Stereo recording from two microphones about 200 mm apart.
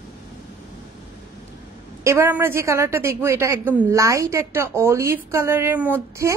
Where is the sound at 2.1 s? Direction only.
10° right (ahead or behind).